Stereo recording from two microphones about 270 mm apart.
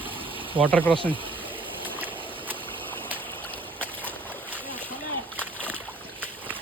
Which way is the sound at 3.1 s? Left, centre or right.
Centre.